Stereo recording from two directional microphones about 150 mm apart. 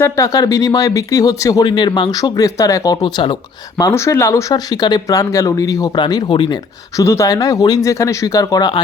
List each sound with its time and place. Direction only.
0.0 s speech: 20° left (ahead or behind)